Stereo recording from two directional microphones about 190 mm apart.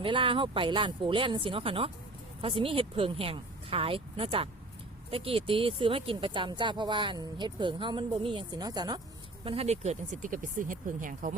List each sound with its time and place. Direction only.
0.0 s speech: 25° right (ahead or behind)
9.4 s speech: 30° right (ahead or behind)